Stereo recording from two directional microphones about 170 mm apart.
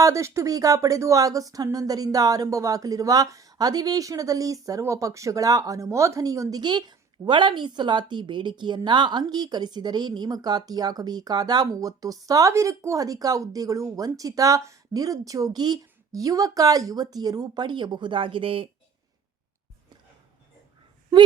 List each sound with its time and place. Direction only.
0.0 s a woman's voice: 15° right (ahead or behind)